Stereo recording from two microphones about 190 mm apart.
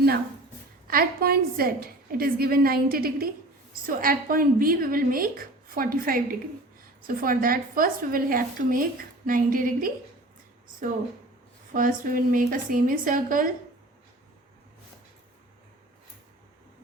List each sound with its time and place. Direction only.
0.9 s a woman's voice: 50° right (ahead or behind)
11.7 s a woman's voice: 45° right (ahead or behind)